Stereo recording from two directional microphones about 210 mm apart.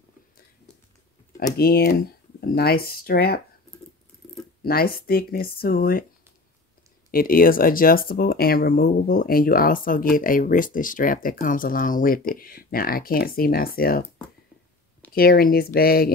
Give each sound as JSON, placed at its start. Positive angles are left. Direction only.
{"t": 1.6, "sound": "speech", "side_deg": 45}
{"t": 4.6, "sound": "speech", "side_deg": 45}
{"t": 7.1, "sound": "speech", "side_deg": 45}
{"t": 15.1, "sound": "speech", "side_deg": 45}